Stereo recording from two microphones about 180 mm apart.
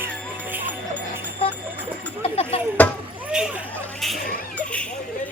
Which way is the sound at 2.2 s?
35° left (ahead or behind).